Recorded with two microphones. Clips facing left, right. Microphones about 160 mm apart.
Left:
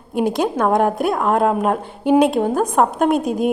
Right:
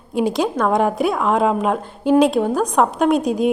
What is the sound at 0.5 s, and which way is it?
Speech, 5° left (ahead or behind).